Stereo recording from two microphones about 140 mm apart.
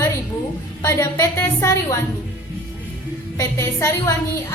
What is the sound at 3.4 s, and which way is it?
Speech, 20° left (ahead or behind).